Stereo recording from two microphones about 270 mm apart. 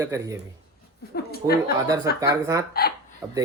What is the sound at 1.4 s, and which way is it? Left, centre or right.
Speech, centre.